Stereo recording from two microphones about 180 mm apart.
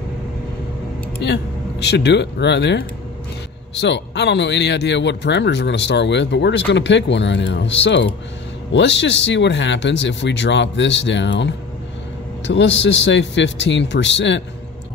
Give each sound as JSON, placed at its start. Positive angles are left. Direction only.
{"t": 1.2, "sound": "speech", "side_deg": 65}
{"t": 3.8, "sound": "speech", "side_deg": 70}